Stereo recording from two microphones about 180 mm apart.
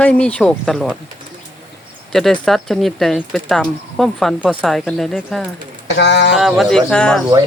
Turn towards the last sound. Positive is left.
turn(degrees=5)  # may be behind; listen again after turning